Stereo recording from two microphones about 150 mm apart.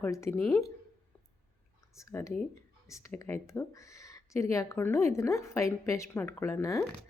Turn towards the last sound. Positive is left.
turn(degrees=20)  # may be behind; listen again after turning